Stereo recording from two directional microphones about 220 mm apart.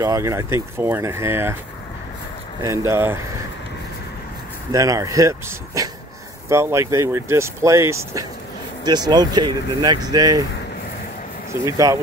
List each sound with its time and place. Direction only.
0.0 s speech: 15° right (ahead or behind)
2.9 s speech: 10° right (ahead or behind)
4.7 s speech: 15° right (ahead or behind)
11.6 s speech: 15° right (ahead or behind)